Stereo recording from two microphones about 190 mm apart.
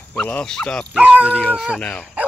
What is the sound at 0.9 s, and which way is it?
Speech, 5° right (ahead or behind).